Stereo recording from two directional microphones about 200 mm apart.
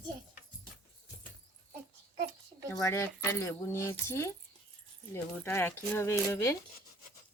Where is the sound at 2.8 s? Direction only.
15° left (ahead or behind).